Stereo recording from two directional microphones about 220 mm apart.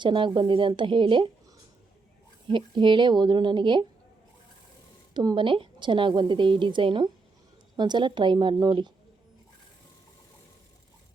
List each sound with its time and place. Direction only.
0.0 s a woman's voice: 20° right (ahead or behind)
2.5 s a woman's voice: 20° right (ahead or behind)
5.1 s a woman's voice: 20° right (ahead or behind)